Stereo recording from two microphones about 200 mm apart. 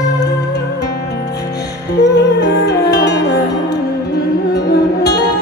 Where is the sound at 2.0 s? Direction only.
55° left (ahead or behind).